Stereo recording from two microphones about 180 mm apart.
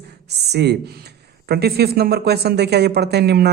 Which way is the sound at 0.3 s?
65° right (ahead or behind).